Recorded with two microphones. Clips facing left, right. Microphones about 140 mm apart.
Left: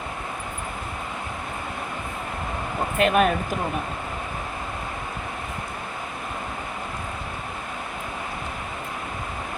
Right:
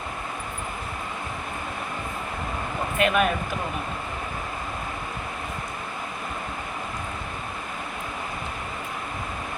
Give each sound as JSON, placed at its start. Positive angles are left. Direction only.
{"t": 3.0, "sound": "speech", "side_deg": 40}